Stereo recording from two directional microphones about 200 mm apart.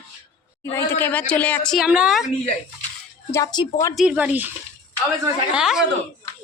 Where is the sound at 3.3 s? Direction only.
20° left (ahead or behind).